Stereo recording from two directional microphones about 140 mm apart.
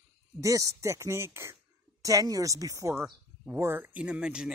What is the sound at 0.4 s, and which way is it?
Speech, 25° right (ahead or behind).